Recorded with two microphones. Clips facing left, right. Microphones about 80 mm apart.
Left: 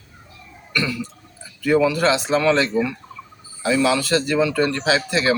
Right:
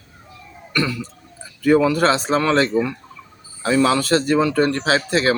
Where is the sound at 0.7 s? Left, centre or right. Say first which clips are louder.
Right 2 dB; right.